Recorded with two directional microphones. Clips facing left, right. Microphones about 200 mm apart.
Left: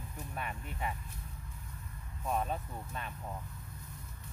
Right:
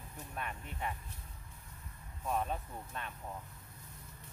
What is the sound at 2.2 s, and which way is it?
Speech, 5° left (ahead or behind).